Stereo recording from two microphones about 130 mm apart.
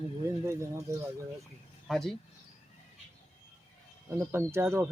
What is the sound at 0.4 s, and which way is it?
Speech, 20° right (ahead or behind).